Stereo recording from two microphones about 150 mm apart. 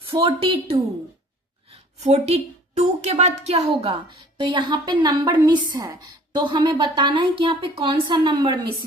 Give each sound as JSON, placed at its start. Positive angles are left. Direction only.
{"t": 0.0, "sound": "a woman's voice", "side_deg": -35}
{"t": 2.0, "sound": "a woman's voice", "side_deg": -45}
{"t": 4.4, "sound": "a woman's voice", "side_deg": -30}